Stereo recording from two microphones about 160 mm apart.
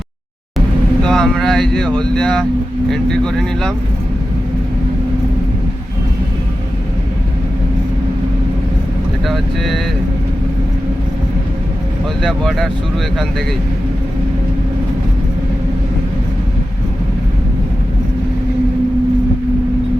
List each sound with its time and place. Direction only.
1.0 s speech: centre (ahead or behind)
9.2 s speech: centre (ahead or behind)
12.2 s speech: centre (ahead or behind)